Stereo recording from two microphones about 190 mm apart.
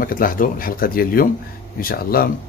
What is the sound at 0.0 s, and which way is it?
Speech, 50° left (ahead or behind).